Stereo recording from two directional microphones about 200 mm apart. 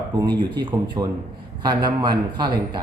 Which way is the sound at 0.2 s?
20° right (ahead or behind).